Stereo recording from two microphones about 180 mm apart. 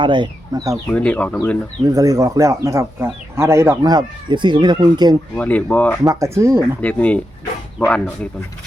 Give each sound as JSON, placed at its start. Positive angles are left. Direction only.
{"t": 0.0, "sound": "speech", "side_deg": -25}
{"t": 0.9, "sound": "speech", "side_deg": 10}
{"t": 1.8, "sound": "speech", "side_deg": -20}
{"t": 5.4, "sound": "speech", "side_deg": 10}
{"t": 6.0, "sound": "speech", "side_deg": -15}
{"t": 6.8, "sound": "speech", "side_deg": 5}